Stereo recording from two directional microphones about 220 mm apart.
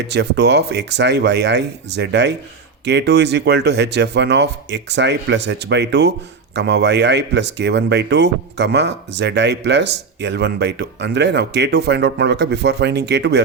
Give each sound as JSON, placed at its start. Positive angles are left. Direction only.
{"t": 0.0, "sound": "speech", "side_deg": -50}